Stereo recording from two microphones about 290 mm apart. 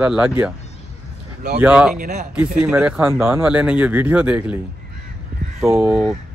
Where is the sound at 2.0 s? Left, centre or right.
Right.